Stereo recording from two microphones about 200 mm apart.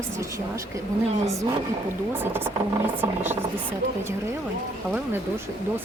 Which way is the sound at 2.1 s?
10° right (ahead or behind).